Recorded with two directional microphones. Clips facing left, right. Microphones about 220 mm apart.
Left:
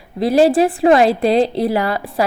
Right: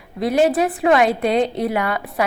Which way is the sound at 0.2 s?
30° left (ahead or behind).